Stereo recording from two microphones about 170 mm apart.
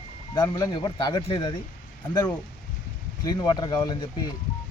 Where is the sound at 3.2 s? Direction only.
25° left (ahead or behind).